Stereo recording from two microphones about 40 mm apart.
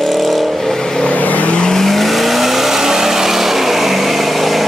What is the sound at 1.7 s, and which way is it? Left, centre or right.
Vehicle, centre.